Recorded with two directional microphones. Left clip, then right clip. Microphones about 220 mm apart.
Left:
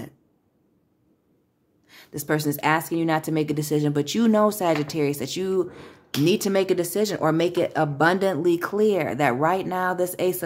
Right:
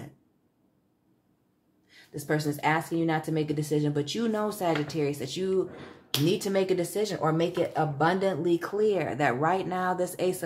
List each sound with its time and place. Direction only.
1.9 s speech: 35° left (ahead or behind)